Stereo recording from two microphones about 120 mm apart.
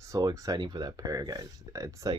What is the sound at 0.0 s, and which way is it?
Speech, 30° right (ahead or behind).